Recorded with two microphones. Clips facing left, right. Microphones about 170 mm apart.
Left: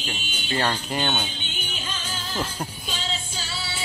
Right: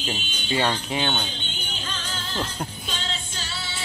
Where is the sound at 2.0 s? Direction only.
5° left (ahead or behind).